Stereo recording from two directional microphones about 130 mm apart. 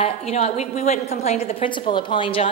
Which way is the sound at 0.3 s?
60° left (ahead or behind).